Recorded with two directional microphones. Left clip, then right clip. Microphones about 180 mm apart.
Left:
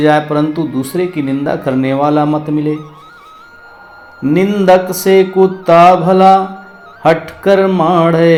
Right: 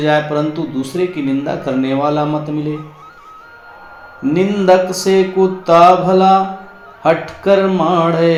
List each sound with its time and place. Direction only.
0.0 s speech: 35° left (ahead or behind)
4.2 s speech: 35° left (ahead or behind)